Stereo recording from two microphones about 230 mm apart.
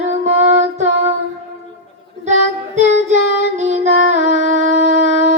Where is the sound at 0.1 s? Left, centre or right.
Right.